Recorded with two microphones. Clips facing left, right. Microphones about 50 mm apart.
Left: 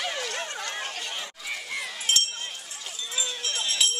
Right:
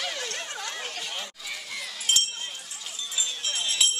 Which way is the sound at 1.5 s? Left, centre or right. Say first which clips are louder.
Left 3 dB; centre.